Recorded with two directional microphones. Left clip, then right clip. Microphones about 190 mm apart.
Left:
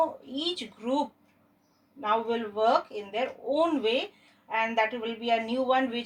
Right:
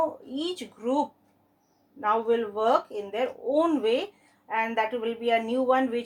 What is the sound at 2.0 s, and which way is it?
Speech, 35° right (ahead or behind).